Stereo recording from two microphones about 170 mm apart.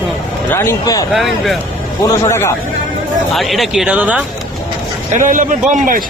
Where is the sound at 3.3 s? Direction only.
Centre (ahead or behind).